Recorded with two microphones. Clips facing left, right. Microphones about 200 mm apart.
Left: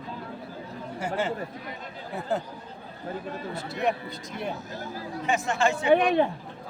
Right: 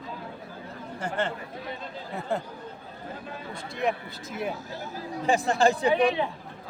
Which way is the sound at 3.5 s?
Centre (ahead or behind).